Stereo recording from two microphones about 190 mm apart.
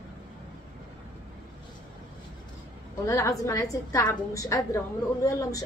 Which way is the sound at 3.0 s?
15° left (ahead or behind).